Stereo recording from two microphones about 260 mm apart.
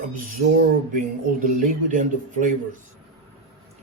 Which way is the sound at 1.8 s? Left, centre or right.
Right.